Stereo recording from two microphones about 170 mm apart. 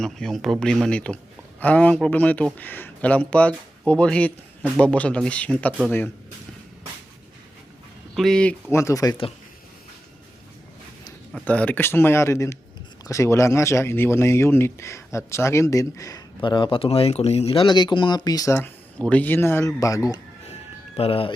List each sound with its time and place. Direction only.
0.0 s a man's voice: centre (ahead or behind)
8.1 s speech: centre (ahead or behind)
8.7 s speech: 20° left (ahead or behind)
11.4 s a man's voice: 10° left (ahead or behind)
18.5 s a man's voice: 10° left (ahead or behind)
20.9 s speech: 35° left (ahead or behind)